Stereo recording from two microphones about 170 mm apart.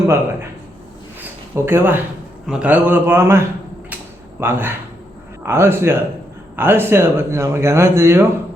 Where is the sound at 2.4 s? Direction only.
10° right (ahead or behind).